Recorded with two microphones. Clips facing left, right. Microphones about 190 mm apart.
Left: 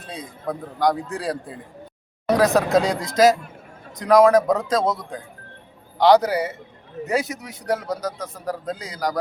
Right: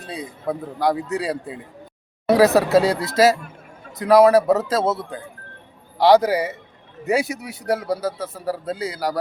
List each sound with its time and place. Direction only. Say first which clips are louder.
0.1 s a man's voice: right 3 dB; centre (ahead or behind)